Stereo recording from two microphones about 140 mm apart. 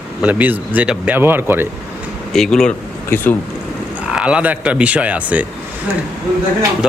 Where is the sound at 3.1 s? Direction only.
15° left (ahead or behind).